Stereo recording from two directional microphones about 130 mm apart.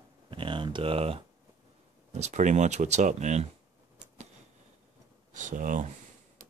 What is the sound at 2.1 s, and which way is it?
Speech, 60° right (ahead or behind).